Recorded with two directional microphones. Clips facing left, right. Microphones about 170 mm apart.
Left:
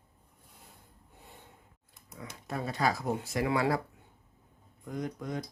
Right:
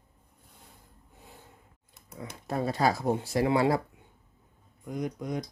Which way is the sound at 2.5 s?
35° right (ahead or behind).